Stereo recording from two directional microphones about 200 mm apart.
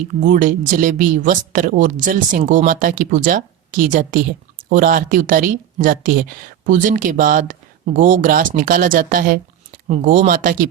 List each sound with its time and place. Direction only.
0.2 s a woman's voice: 40° right (ahead or behind)